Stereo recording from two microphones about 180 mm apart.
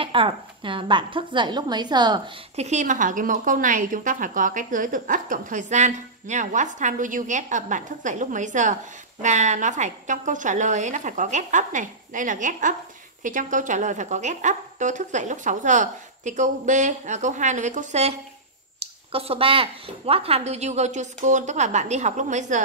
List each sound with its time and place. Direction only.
0.0 s a woman's voice: 30° right (ahead or behind)
2.5 s speech: 40° right (ahead or behind)